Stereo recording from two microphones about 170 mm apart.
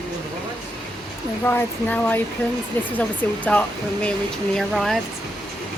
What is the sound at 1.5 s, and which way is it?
Speech, 10° left (ahead or behind).